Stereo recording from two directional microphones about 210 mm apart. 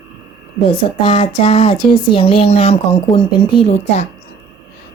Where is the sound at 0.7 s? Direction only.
25° left (ahead or behind).